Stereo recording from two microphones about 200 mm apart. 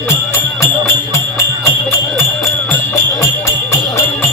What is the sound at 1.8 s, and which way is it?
Music, centre (ahead or behind).